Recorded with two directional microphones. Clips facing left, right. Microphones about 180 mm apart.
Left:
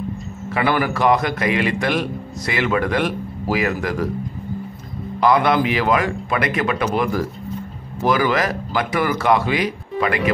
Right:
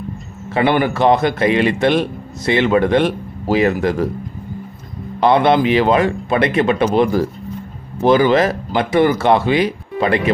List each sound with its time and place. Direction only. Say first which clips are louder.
0.5 s a man's voice: right 4 dB; 25° right (ahead or behind)
5.2 s a man's voice: right 4 dB; 25° right (ahead or behind)